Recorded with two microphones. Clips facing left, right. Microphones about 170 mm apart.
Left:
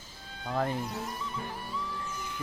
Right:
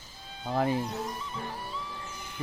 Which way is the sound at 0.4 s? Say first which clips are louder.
Right 3 dB; 15° right (ahead or behind).